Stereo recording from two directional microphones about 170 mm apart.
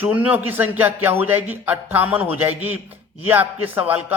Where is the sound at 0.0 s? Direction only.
10° right (ahead or behind).